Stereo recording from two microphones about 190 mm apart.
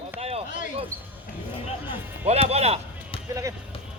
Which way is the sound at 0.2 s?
30° right (ahead or behind).